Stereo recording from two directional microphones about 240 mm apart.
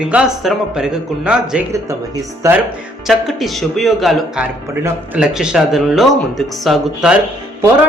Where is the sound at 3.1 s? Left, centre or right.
Centre.